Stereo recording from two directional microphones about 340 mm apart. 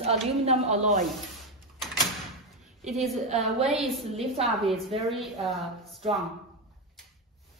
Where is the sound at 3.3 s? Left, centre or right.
Centre.